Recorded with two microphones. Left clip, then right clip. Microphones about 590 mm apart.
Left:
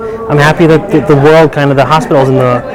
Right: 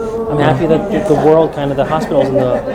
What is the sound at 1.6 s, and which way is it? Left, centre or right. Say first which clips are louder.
Speech: left 7 dB; left.